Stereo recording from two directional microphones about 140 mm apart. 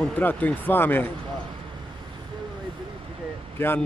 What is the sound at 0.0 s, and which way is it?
Speech, 10° left (ahead or behind).